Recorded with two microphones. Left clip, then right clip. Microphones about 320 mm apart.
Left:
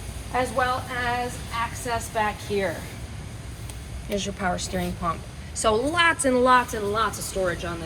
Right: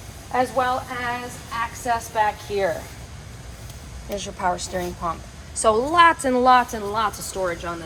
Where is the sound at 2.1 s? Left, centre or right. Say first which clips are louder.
Right 1 dB; right.